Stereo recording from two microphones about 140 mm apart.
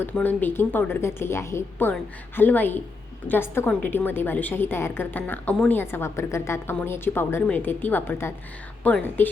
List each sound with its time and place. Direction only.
0.0 s a woman's voice: 10° left (ahead or behind)